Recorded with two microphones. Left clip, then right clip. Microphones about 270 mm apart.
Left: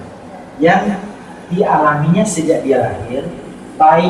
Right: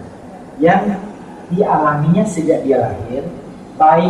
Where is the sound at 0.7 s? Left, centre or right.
Centre.